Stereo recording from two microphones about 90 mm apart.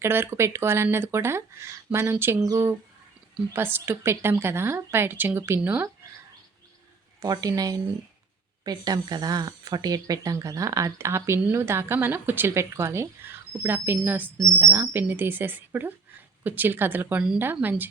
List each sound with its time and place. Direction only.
0.0 s speech: 25° right (ahead or behind)
2.4 s speech: 40° right (ahead or behind)
3.5 s speech: 25° right (ahead or behind)
7.2 s speech: 40° right (ahead or behind); by 17.8 s 20° right (ahead or behind)